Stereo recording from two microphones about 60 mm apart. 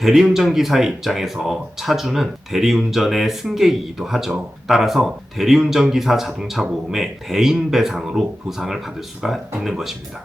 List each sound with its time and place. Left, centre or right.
0.0 s speech: centre